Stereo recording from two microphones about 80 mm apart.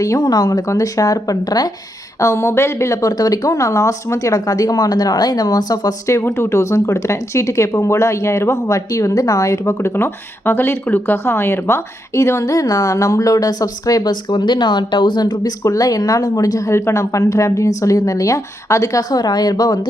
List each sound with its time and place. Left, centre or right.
0.2 s speech: left
2.1 s speech: left
6.1 s speech: left
15.6 s speech: left